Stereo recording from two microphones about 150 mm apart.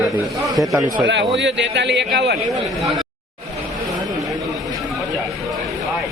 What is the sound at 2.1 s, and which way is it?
Speech, 90° right.